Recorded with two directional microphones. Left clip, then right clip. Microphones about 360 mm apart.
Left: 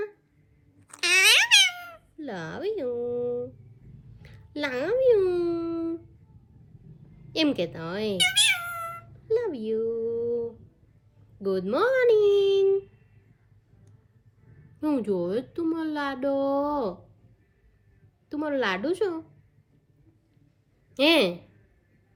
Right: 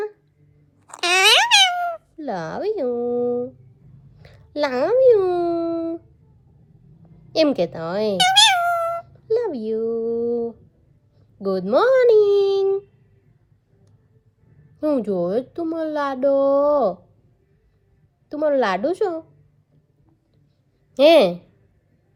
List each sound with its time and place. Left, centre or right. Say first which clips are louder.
0.9 s meow: right 4 dB; centre
4.2 s a sound: right 9 dB; centre
7.3 s cat: right 8 dB; centre
9.8 s music: right 7 dB; right
11.4 s a child's voice: right 7 dB; centre
14.8 s a child's voice: right 6 dB; centre
18.3 s a child's voice: right 8 dB; centre
20.9 s a child's voice: right 9 dB; centre